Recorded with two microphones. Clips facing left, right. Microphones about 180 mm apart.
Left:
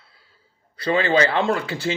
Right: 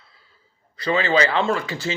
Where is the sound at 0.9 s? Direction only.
50° left (ahead or behind).